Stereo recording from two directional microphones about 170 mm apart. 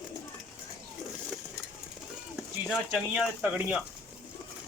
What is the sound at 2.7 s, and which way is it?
Speech, 5° right (ahead or behind).